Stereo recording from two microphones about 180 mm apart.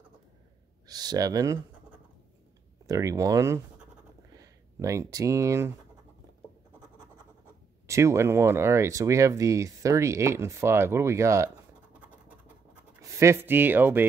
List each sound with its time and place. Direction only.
0.8 s speech: 20° right (ahead or behind)
2.9 s speech: 20° right (ahead or behind)
7.8 s speech: 15° right (ahead or behind)
13.2 s speech: 15° right (ahead or behind)